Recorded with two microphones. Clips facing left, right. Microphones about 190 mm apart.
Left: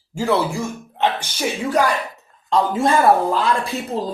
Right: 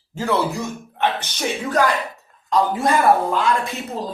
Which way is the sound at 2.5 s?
25° left (ahead or behind).